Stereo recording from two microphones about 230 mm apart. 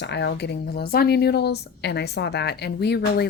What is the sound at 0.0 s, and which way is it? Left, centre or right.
Speech, left.